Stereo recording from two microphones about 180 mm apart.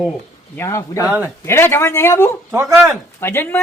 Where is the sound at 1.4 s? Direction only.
15° left (ahead or behind).